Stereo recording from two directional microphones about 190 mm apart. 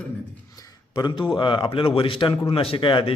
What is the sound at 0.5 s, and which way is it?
A man's voice, 20° left (ahead or behind).